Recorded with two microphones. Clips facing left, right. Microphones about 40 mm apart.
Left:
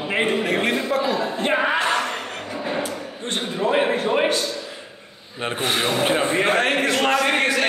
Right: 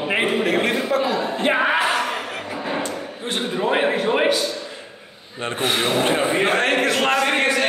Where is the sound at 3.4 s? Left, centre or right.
Centre.